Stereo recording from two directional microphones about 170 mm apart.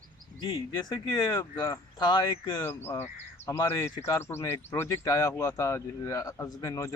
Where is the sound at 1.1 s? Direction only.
20° left (ahead or behind).